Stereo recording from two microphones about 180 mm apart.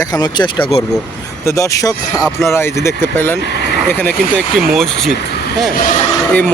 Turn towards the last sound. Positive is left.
turn(degrees=5)  # may be behind; listen again after turning